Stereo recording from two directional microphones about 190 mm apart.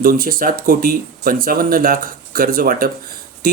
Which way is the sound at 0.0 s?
50° right (ahead or behind).